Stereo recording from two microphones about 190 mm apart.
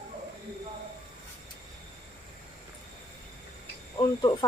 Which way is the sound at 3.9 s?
25° left (ahead or behind).